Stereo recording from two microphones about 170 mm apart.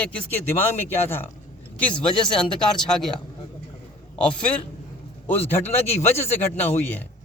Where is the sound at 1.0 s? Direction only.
15° left (ahead or behind).